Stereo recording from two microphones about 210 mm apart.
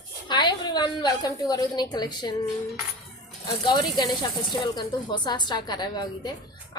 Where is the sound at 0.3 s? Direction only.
20° left (ahead or behind).